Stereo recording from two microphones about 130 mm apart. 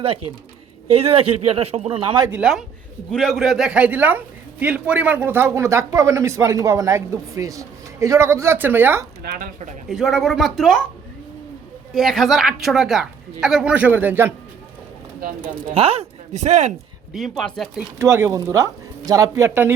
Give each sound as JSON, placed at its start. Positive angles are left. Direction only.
{"t": 0.9, "sound": "speech", "side_deg": -50}
{"t": 2.3, "sound": "a woman's voice", "side_deg": -5}
{"t": 9.3, "sound": "speech", "side_deg": -80}
{"t": 9.9, "sound": "a woman's voice", "side_deg": 0}
{"t": 11.9, "sound": "a woman's voice", "side_deg": 0}
{"t": 15.7, "sound": "speech", "side_deg": -50}
{"t": 17.2, "sound": "a woman's voice", "side_deg": 0}
{"t": 18.0, "sound": "speech", "side_deg": -20}